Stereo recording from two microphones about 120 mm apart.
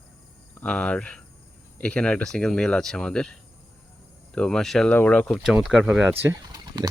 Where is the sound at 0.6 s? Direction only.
10° left (ahead or behind).